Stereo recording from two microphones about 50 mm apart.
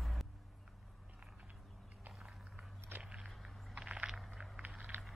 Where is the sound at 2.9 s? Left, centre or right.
Right.